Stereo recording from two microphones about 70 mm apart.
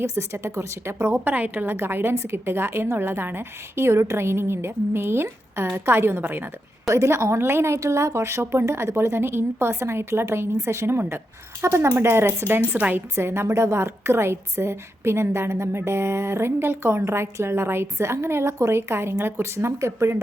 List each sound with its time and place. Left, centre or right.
0.0 s a woman's voice: right
1.0 s a woman's voice: right
6.8 s a woman's voice: right